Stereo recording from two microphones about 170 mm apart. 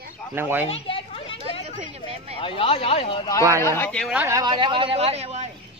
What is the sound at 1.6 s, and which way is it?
Speech, 35° right (ahead or behind).